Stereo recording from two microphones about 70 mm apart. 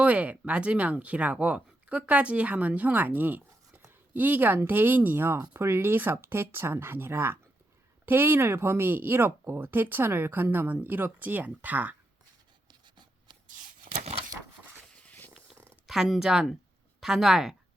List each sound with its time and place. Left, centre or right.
0.0 s speech: centre
12.6 s writing: right
15.0 s a sound: left
15.9 s speech: centre